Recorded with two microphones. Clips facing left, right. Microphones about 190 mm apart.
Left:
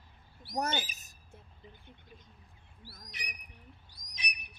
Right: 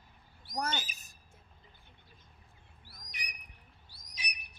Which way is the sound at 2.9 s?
15° right (ahead or behind).